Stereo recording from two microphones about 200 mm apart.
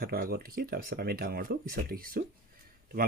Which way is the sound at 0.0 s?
50° right (ahead or behind).